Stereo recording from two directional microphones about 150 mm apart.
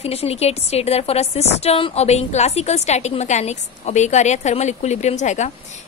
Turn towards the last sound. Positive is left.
turn(degrees=50)  # may be behind; listen again after turning